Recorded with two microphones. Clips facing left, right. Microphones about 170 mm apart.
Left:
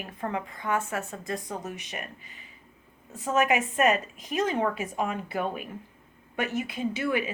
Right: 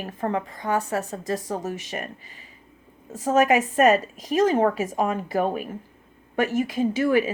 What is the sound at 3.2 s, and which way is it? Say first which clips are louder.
A woman's voice: right 5 dB; 40° right (ahead or behind).